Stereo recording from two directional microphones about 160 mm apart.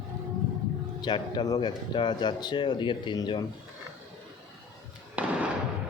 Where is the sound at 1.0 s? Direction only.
30° left (ahead or behind).